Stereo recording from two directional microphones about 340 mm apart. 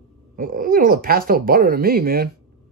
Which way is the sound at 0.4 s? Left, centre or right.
Right.